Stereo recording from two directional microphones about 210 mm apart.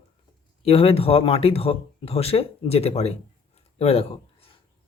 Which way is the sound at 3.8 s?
30° left (ahead or behind).